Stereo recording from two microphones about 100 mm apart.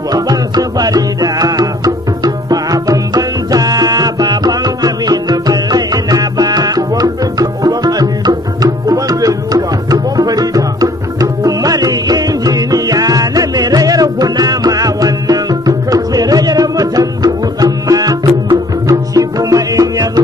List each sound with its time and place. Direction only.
0.1 s music: 40° right (ahead or behind)